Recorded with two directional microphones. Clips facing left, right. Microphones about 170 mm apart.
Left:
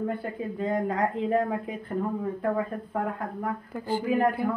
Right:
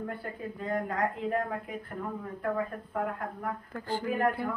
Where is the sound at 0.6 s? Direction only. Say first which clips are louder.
Left 5 dB; 25° left (ahead or behind).